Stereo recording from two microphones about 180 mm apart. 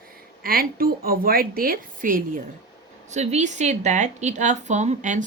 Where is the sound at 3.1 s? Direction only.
40° right (ahead or behind).